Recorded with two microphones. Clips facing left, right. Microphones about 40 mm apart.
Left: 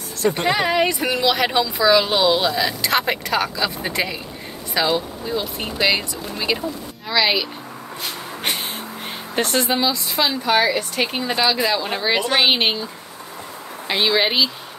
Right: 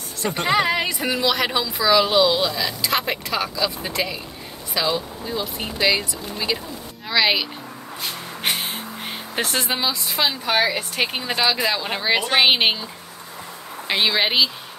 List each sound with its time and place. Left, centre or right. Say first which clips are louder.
0.3 s speech: left 1 dB; left
0.6 s a woman's voice: left 2 dB; centre
2.3 s speech: left 3 dB; left
2.8 s speech: left 1 dB; centre
3.5 s a woman's voice: left 1 dB; centre
5.9 s speech: right 1 dB; centre
7.1 s speech: even; centre
8.5 s snort: right 1 dB; centre
9.3 s a woman's voice: left 4 dB; centre
13.8 s a woman's voice: left 1 dB; centre